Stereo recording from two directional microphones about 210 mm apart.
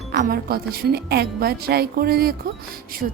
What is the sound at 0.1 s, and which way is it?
Speech, 45° right (ahead or behind).